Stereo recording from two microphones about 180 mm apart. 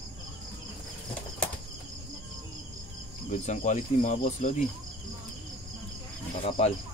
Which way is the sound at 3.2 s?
45° left (ahead or behind).